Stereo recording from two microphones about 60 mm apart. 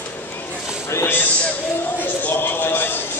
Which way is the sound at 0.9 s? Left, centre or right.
Left.